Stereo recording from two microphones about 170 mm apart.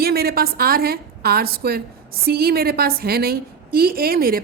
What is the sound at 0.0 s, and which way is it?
A woman's voice, 65° right (ahead or behind).